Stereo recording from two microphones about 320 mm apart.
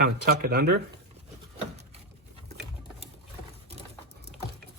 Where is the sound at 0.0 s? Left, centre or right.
Right.